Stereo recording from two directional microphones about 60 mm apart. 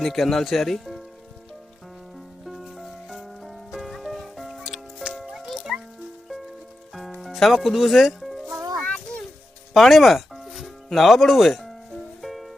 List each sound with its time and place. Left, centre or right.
0.0 s speech: centre
2.4 s music: centre
7.2 s speech: centre
8.8 s a sound: centre
9.7 s music: centre